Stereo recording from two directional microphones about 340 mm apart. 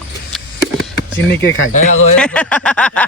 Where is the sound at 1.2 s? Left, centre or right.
Left.